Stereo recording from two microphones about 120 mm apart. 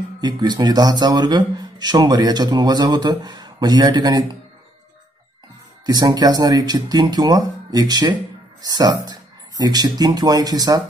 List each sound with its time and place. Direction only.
0.2 s speech: 35° right (ahead or behind)
5.9 s speech: 35° right (ahead or behind)